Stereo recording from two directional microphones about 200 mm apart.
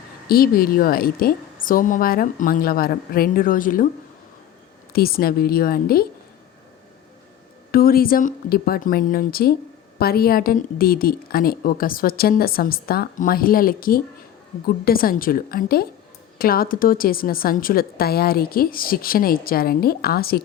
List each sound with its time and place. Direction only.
0.3 s a woman's voice: 50° left (ahead or behind)
4.9 s a woman's voice: 50° left (ahead or behind)
7.7 s a woman's voice: 45° left (ahead or behind)